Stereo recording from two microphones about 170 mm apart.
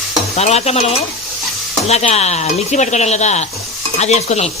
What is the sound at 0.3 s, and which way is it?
Speech, 40° left (ahead or behind).